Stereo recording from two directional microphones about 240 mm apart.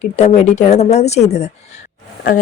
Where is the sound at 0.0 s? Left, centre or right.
Left.